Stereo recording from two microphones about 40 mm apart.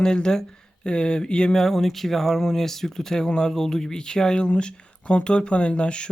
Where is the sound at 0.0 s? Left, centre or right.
Centre.